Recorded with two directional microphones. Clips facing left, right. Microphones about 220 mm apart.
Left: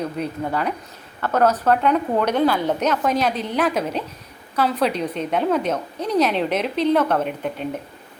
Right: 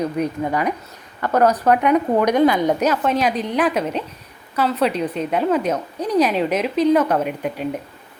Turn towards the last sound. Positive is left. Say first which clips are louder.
# right 2 dB
turn(degrees=-5)  # may be behind; listen again after turning